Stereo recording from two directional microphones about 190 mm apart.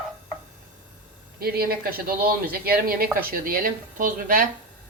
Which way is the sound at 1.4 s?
55° right (ahead or behind).